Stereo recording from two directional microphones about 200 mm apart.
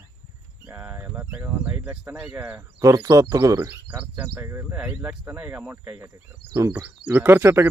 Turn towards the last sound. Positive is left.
turn(degrees=-10)  # may be behind; listen again after turning